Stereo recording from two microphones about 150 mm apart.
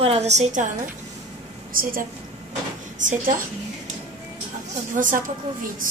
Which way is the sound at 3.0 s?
60° right (ahead or behind).